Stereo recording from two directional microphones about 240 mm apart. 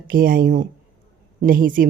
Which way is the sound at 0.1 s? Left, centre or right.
Right.